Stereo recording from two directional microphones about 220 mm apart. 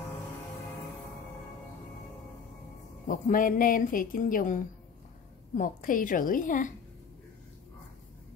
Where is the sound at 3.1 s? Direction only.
40° left (ahead or behind).